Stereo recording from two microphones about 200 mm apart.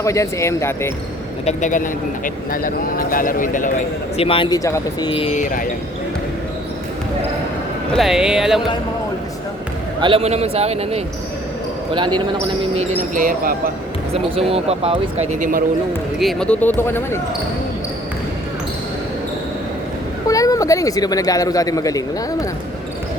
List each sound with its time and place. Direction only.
0.0 s speech: 15° left (ahead or behind)
1.5 s speech: 40° left (ahead or behind)
4.2 s speech: 25° left (ahead or behind)
5.4 s a man's voice: 40° left (ahead or behind)
7.9 s speech: centre (ahead or behind)
10.0 s speech: 25° right (ahead or behind)
13.1 s speech: 45° right (ahead or behind)
14.1 s speech: 30° right (ahead or behind)
16.1 s speech: centre (ahead or behind)
20.2 s speech: 15° left (ahead or behind)